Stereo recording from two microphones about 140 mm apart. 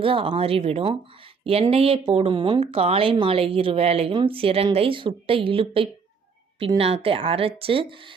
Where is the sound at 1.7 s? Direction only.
40° right (ahead or behind).